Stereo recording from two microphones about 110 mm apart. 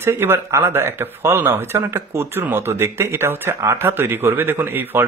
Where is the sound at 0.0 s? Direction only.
20° right (ahead or behind).